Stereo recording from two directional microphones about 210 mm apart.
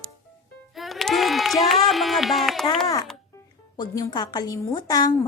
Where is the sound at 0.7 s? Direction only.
Centre (ahead or behind).